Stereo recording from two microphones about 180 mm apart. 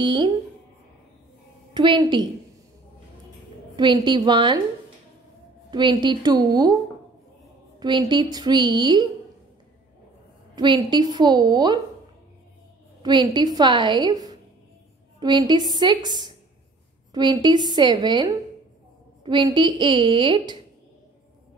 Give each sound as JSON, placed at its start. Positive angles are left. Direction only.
{"t": 0.0, "sound": "a woman's voice", "side_deg": -25}
{"t": 1.7, "sound": "a woman's voice", "side_deg": -25}
{"t": 3.7, "sound": "a woman's voice", "side_deg": -25}
{"t": 5.7, "sound": "a woman's voice", "side_deg": -25}
{"t": 7.8, "sound": "a woman's voice", "side_deg": -25}
{"t": 10.5, "sound": "a woman's voice", "side_deg": -25}
{"t": 13.0, "sound": "a woman's voice", "side_deg": -25}